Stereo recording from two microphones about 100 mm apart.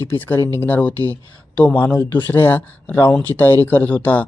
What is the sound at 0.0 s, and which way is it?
A man's voice, 20° left (ahead or behind).